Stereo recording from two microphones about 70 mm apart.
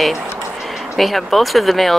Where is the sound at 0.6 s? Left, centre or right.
Centre.